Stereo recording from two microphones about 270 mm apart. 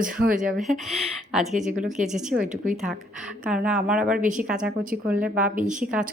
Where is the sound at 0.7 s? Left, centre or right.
Centre.